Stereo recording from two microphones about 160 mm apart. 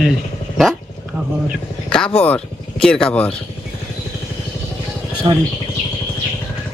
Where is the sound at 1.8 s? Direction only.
5° left (ahead or behind).